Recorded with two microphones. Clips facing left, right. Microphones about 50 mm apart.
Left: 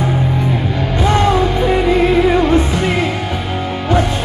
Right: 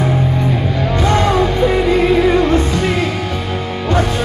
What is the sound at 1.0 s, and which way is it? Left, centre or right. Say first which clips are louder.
Music: left 1 dB; centre.